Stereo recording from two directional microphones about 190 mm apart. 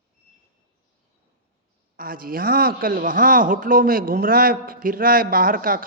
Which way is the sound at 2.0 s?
50° right (ahead or behind).